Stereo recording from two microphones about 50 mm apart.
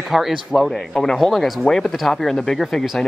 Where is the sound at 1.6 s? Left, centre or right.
Centre.